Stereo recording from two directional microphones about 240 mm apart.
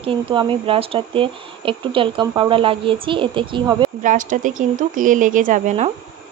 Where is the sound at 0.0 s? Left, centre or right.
Right.